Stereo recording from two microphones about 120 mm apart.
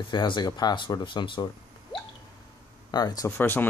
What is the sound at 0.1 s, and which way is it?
Speech, 40° left (ahead or behind).